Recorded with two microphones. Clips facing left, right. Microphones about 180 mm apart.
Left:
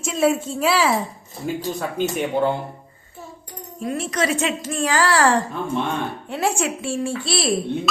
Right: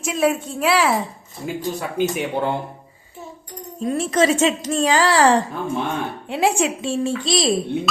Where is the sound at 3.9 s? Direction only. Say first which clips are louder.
Right 5 dB; 30° right (ahead or behind).